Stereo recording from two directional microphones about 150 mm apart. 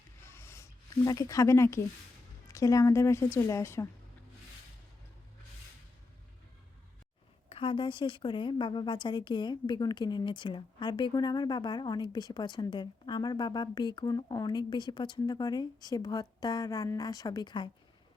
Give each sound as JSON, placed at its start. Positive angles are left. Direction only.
{"t": 0.2, "sound": "a sound", "side_deg": 15}
{"t": 2.5, "sound": "a woman's voice", "side_deg": 20}
{"t": 7.5, "sound": "a woman's voice", "side_deg": 35}